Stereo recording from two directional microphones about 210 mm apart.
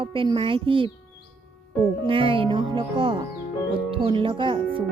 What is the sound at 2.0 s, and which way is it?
Speech, 25° right (ahead or behind).